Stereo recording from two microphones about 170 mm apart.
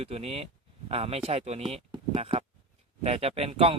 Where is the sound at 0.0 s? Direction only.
35° right (ahead or behind).